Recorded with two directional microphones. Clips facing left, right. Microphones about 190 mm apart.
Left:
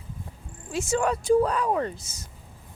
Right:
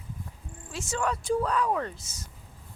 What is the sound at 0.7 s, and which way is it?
Speech, 10° left (ahead or behind).